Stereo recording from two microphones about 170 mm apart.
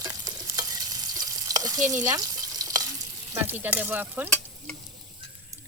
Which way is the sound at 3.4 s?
10° right (ahead or behind).